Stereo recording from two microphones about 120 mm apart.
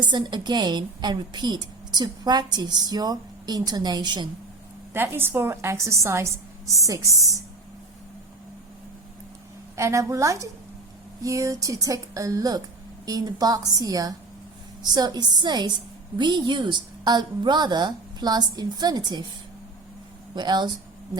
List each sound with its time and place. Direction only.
0.0 s a woman's voice: 40° right (ahead or behind)
4.9 s a woman's voice: 20° right (ahead or behind)
9.7 s a woman's voice: 25° right (ahead or behind)
20.3 s a woman's voice: 35° right (ahead or behind)